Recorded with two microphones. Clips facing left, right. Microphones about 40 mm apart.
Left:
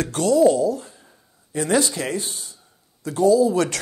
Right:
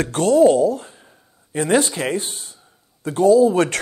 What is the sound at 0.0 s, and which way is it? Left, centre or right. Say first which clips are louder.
Speech: right 3 dB; right.